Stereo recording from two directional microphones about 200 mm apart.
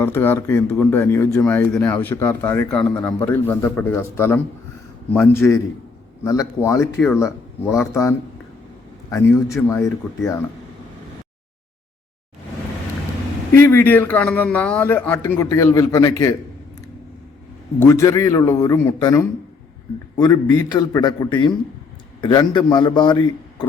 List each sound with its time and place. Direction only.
0.0 s speech: 10° left (ahead or behind)
13.6 s speech: 10° left (ahead or behind)
17.7 s a man's voice: 15° left (ahead or behind)